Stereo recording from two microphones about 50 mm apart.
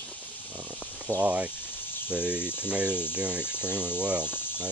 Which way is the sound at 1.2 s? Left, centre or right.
Right.